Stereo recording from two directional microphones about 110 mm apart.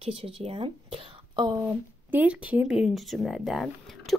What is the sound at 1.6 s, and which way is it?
Speech, 15° right (ahead or behind).